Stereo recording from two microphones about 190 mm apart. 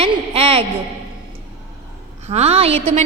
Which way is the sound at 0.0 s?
30° right (ahead or behind).